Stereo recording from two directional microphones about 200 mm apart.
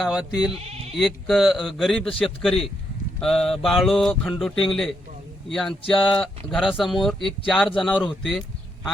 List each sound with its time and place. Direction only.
0.0 s speech: 5° right (ahead or behind)
0.5 s speech: 30° right (ahead or behind)
0.9 s speech: centre (ahead or behind)